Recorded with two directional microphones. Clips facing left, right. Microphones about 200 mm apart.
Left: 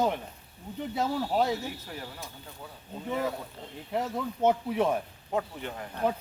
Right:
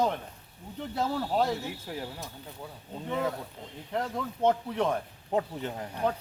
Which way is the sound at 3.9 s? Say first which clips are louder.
Left 1 dB; 5° left (ahead or behind).